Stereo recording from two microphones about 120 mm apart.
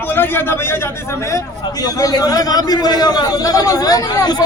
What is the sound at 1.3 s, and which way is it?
A man's voice, 30° left (ahead or behind).